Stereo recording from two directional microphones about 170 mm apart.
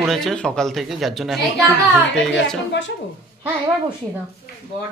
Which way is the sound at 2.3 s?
90° left.